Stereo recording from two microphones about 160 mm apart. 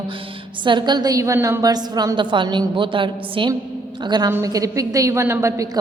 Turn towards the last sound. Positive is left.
turn(degrees=-20)  # may be behind; listen again after turning